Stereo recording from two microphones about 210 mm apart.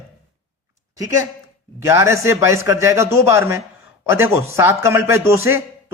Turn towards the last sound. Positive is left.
turn(degrees=-10)  # may be behind; listen again after turning